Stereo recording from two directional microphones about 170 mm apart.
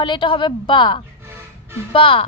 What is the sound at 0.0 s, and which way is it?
A woman's voice, 30° left (ahead or behind).